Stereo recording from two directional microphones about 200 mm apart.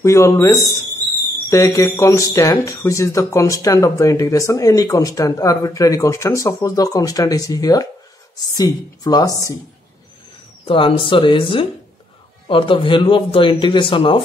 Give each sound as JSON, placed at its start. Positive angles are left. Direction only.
{"t": 0.0, "sound": "speech", "side_deg": 15}
{"t": 10.6, "sound": "a man's voice", "side_deg": 25}